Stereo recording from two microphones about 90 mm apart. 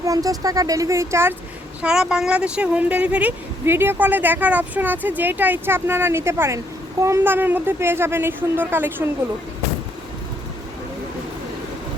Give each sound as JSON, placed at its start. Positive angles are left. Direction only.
{"t": 0.0, "sound": "speech", "side_deg": -40}
{"t": 1.8, "sound": "speech", "side_deg": -10}
{"t": 7.3, "sound": "speech", "side_deg": -25}